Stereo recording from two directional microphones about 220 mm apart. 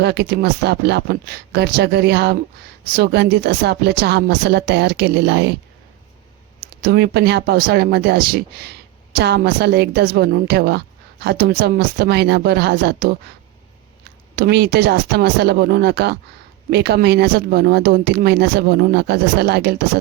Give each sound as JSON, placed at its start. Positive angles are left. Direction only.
{"t": 0.0, "sound": "a woman's voice", "side_deg": -50}
{"t": 6.8, "sound": "a woman's voice", "side_deg": -45}
{"t": 14.3, "sound": "a woman's voice", "side_deg": -45}